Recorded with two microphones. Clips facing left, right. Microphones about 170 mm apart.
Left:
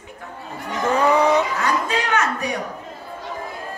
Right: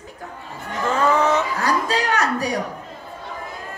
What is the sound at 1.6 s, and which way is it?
Speech, 35° right (ahead or behind).